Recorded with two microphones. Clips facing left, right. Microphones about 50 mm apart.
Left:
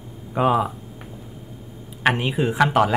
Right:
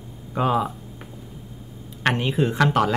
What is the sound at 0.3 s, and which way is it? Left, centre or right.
Speech, centre.